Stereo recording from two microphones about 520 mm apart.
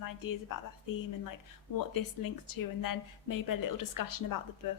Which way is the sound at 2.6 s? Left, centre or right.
Left.